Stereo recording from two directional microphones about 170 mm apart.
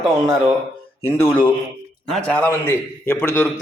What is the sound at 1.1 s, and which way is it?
A man's voice, 10° left (ahead or behind).